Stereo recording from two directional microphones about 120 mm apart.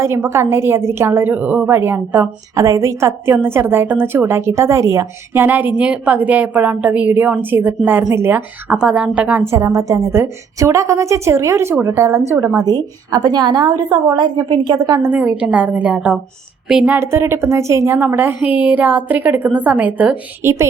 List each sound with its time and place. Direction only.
0.0 s a woman's voice: 20° right (ahead or behind)
2.6 s a woman's voice: 25° right (ahead or behind)
8.7 s a woman's voice: 10° right (ahead or behind)
9.5 s a woman's voice: 25° right (ahead or behind)
12.6 s a woman's voice: 35° right (ahead or behind)
15.1 s a woman's voice: 10° right (ahead or behind)
17.0 s a woman's voice: 20° right (ahead or behind)